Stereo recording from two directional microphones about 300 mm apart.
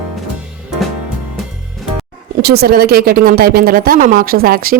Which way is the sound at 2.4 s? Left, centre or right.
Right.